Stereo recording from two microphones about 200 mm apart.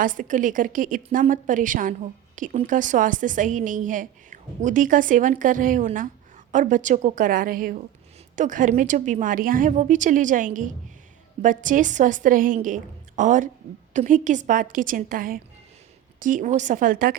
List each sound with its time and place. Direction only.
0.0 s a woman's voice: 40° right (ahead or behind)